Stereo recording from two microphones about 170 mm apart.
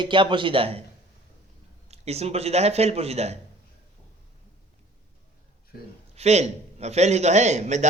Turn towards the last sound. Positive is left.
turn(degrees=-45)  # may be behind; listen again after turning